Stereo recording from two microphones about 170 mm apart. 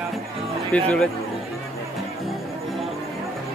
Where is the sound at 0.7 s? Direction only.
10° left (ahead or behind).